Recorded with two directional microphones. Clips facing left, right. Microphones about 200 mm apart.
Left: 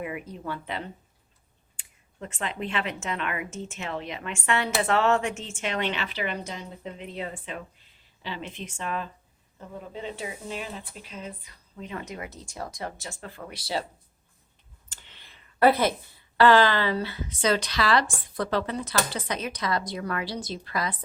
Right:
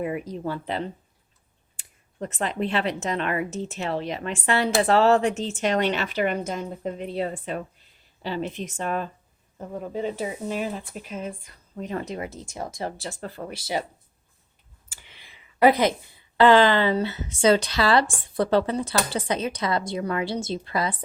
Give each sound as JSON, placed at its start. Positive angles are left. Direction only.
{"t": 0.0, "sound": "speech", "side_deg": -35}
{"t": 2.1, "sound": "speech", "side_deg": -40}
{"t": 14.8, "sound": "a sound", "side_deg": -10}
{"t": 16.4, "sound": "speech", "side_deg": -25}